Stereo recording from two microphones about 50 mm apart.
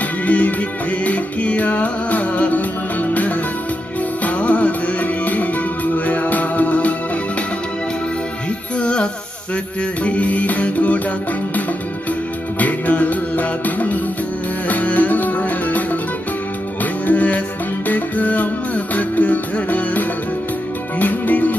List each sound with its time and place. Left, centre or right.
0.3 s music: left
8.7 s music: left
12.5 s music: left
17.0 s music: left